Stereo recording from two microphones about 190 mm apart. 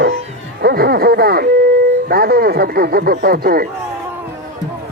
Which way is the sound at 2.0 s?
55° right (ahead or behind).